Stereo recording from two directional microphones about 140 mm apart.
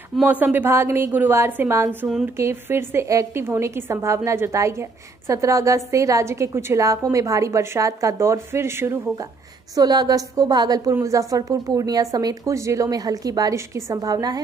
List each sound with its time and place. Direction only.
0.2 s a woman's voice: 10° right (ahead or behind)
9.8 s a woman's voice: 30° right (ahead or behind)